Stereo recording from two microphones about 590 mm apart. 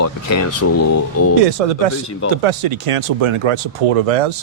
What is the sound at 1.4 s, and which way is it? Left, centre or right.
Speech, right.